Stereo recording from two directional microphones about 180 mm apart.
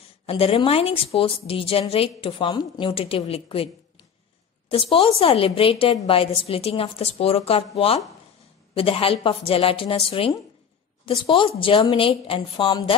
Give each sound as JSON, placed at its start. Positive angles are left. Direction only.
{"t": 0.3, "sound": "a woman's voice", "side_deg": 30}